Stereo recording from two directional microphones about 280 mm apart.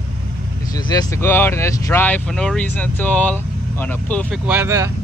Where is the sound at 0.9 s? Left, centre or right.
Centre.